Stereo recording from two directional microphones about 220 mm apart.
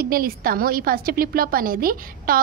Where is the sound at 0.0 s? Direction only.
40° right (ahead or behind).